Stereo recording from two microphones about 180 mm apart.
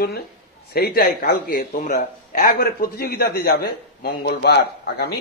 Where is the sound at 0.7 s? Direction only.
55° left (ahead or behind).